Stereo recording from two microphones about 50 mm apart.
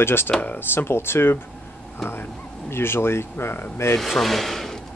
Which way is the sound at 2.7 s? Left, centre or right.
Left.